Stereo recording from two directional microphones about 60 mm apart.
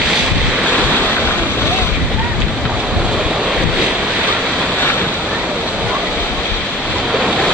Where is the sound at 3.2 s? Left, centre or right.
Centre.